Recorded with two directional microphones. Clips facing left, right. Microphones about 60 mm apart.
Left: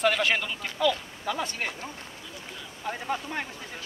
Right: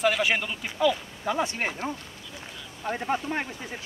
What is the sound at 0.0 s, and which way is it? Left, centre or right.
Speech, centre.